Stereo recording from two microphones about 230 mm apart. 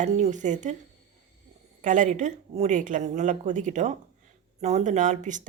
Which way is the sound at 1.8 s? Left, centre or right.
Right.